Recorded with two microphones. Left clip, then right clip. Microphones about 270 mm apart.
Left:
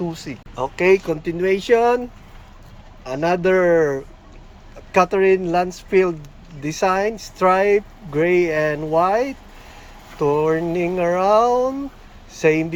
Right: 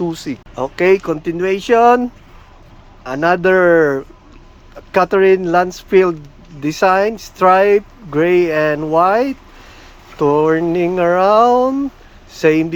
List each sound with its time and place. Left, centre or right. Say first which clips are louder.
0.1 s speech: right 7 dB; right
3.0 s speech: right 5 dB; centre
10.3 s speech: right 6 dB; right